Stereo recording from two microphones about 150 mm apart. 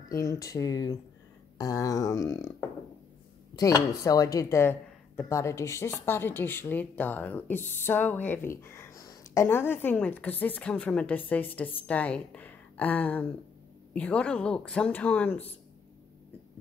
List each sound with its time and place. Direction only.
0.1 s speech: 20° left (ahead or behind)
3.5 s speech: 20° left (ahead or behind)